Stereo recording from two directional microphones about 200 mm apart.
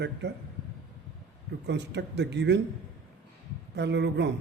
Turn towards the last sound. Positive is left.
turn(degrees=-60)  # may be behind; listen again after turning